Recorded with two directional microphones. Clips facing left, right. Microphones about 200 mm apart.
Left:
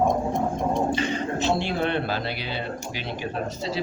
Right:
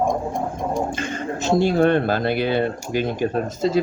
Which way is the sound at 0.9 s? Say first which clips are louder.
Left 1 dB; 50° right (ahead or behind).